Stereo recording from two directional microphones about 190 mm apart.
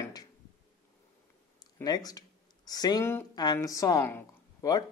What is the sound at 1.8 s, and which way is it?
A woman's voice, 20° left (ahead or behind).